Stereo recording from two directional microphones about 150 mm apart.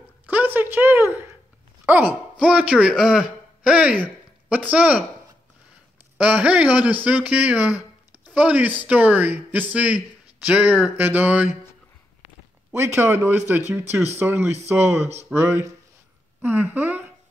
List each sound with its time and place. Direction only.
0.3 s a woman's voice: 10° right (ahead or behind)
6.1 s speech: 10° right (ahead or behind)
12.7 s speech: 15° right (ahead or behind)
14.6 s speech: 45° right (ahead or behind)
15.3 s speech: 15° right (ahead or behind)